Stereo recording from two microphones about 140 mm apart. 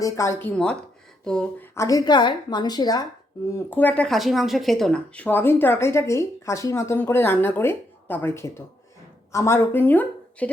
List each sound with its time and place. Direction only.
0.0 s speech: 20° left (ahead or behind)
1.2 s a sound: 5° left (ahead or behind)
1.7 s a woman's voice: 25° left (ahead or behind)
3.7 s a woman's voice: 10° left (ahead or behind)